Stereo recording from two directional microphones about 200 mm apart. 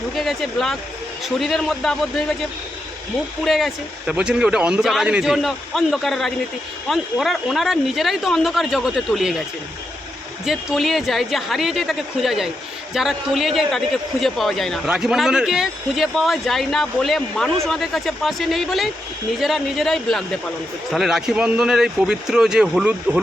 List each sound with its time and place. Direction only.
0.2 s a man's voice: centre (ahead or behind)
3.4 s a man's voice: centre (ahead or behind)
10.4 s a man's voice: centre (ahead or behind)